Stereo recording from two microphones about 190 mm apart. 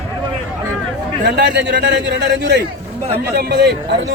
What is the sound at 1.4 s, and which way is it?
A man's voice, 65° right (ahead or behind).